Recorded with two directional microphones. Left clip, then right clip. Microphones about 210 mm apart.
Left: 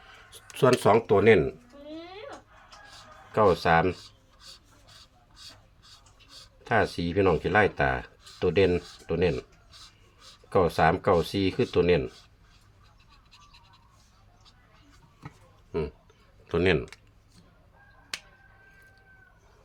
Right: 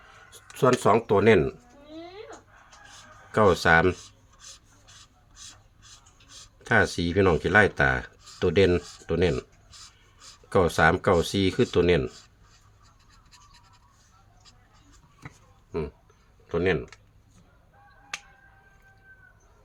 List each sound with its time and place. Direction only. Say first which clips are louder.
0.3 s speech: even; centre (ahead or behind); by 1.5 s 15° right (ahead or behind)
3.3 s speech: right 2 dB; 35° right (ahead or behind)
3.9 s rub: right 2 dB; 10° right (ahead or behind)
5.4 s a sound: right 1 dB; 10° right (ahead or behind)
6.6 s speech: right 3 dB; 35° right (ahead or behind)
9.3 s writing: right 3 dB; 5° right (ahead or behind)
10.5 s speech: right 2 dB; 30° right (ahead or behind)
15.7 s speech: left 1 dB; 10° right (ahead or behind)
16.5 s speech: left 1 dB; 15° left (ahead or behind)